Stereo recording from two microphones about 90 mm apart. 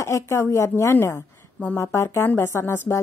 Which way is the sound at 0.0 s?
30° left (ahead or behind).